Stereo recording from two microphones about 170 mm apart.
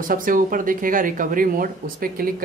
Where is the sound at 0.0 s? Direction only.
55° right (ahead or behind).